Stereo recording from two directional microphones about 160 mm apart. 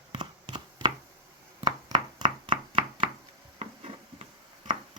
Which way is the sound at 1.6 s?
25° right (ahead or behind).